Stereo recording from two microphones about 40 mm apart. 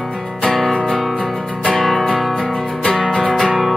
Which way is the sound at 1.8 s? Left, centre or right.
Centre.